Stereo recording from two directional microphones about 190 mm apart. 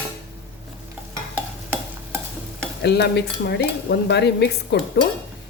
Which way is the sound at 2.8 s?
60° left (ahead or behind).